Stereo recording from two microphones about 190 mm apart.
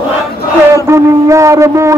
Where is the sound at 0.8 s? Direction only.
15° right (ahead or behind).